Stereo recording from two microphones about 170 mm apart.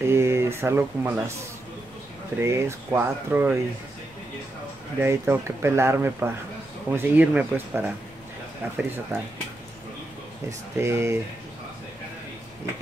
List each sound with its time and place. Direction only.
0.0 s speech: 15° right (ahead or behind)
2.4 s speech: 15° right (ahead or behind)
5.0 s speech: 15° right (ahead or behind)
10.8 s speech: 15° right (ahead or behind)